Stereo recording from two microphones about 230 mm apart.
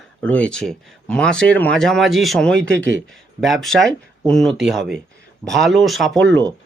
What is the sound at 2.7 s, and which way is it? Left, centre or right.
Speech, right.